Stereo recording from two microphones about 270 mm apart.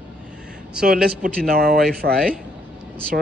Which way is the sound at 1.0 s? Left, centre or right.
Right.